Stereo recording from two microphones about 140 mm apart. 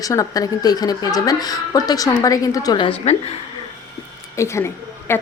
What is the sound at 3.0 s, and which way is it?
Speech, 50° left (ahead or behind).